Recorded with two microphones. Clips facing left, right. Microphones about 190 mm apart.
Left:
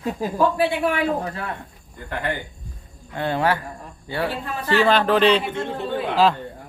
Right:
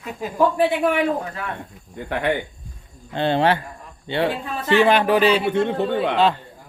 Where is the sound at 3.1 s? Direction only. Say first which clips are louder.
Right 3 dB; 30° right (ahead or behind); by 5.4 s 10° right (ahead or behind).